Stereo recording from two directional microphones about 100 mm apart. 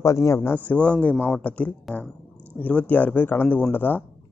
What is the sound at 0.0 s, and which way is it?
Speech, 30° left (ahead or behind).